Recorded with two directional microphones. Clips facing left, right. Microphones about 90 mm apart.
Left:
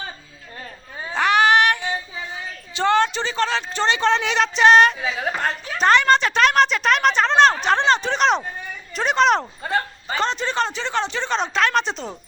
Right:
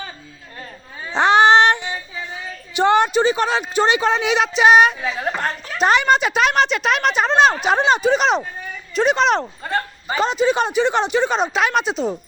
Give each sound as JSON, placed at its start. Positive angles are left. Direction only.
{"t": 1.1, "sound": "female singing", "side_deg": -25}
{"t": 2.7, "sound": "speech", "side_deg": -15}